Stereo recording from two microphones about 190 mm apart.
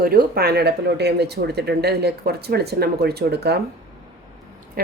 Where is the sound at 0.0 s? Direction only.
50° right (ahead or behind).